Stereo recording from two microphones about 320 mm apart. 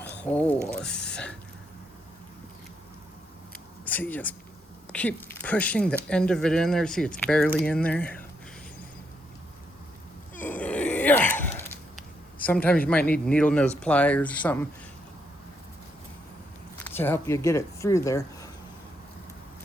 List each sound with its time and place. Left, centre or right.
0.0 s a sound: centre
0.9 s speech: left
3.8 s speech: centre
10.4 s a sound: centre
12.9 s speech: centre
17.0 s speech: centre